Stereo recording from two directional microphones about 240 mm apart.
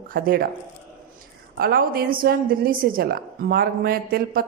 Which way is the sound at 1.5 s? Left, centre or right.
Right.